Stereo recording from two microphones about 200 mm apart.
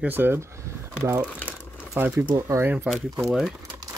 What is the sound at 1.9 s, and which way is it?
Speech, 10° right (ahead or behind).